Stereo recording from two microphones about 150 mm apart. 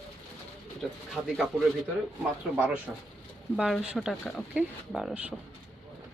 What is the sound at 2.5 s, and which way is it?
Speech, 10° right (ahead or behind).